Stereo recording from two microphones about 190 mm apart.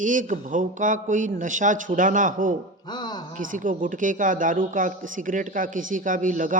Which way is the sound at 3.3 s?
45° right (ahead or behind).